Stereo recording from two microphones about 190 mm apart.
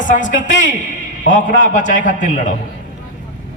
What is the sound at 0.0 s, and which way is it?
A man's voice, 40° left (ahead or behind).